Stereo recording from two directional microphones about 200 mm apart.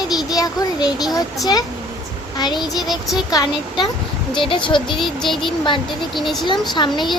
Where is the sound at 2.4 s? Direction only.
20° left (ahead or behind).